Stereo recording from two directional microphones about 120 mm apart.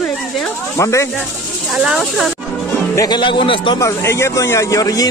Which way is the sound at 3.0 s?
40° left (ahead or behind).